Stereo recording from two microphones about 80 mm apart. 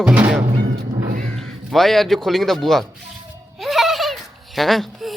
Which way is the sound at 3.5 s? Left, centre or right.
Centre.